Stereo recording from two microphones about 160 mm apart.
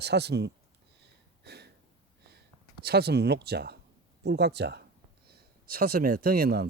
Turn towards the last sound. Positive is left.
turn(degrees=-75)  # may be behind; listen again after turning